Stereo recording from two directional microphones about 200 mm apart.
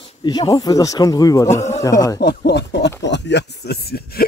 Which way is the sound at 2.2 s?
60° left (ahead or behind).